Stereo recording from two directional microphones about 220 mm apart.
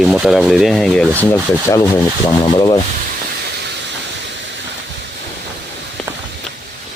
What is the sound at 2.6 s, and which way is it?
Sanding, 15° left (ahead or behind).